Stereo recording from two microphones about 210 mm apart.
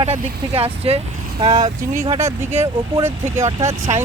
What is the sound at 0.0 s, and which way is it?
Speech, 25° right (ahead or behind).